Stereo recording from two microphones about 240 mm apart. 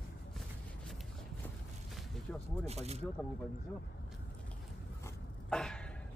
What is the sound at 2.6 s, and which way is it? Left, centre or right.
Speech, right.